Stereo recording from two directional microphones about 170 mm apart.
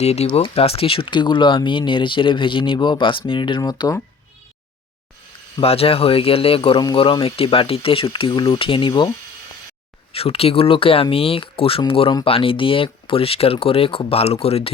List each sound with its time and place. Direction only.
0.0 s speech: 40° left (ahead or behind); by 4.0 s 20° left (ahead or behind)
5.5 s speech: 35° left (ahead or behind)
10.1 s speech: 35° left (ahead or behind)